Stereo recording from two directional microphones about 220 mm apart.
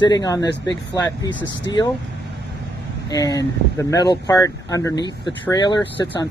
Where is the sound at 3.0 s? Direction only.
15° left (ahead or behind).